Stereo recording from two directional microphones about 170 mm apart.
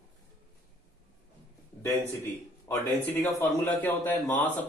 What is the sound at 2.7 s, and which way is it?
A man's voice, 10° left (ahead or behind).